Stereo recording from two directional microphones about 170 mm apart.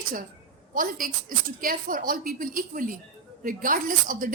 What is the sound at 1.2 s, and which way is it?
A woman's voice, 55° right (ahead or behind).